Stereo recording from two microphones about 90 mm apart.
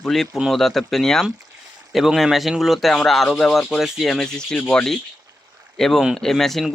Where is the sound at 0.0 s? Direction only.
5° left (ahead or behind).